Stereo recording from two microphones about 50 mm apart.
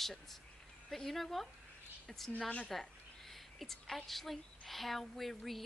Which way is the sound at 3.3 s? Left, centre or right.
Centre.